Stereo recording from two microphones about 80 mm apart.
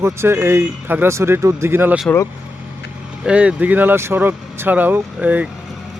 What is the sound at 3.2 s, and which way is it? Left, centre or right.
Speech, centre.